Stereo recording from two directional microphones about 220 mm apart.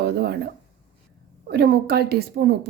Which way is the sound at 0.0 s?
45° right (ahead or behind).